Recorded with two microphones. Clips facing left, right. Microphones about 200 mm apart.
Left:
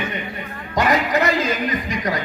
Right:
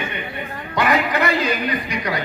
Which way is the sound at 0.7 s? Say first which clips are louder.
Left 1 dB; 40° left (ahead or behind).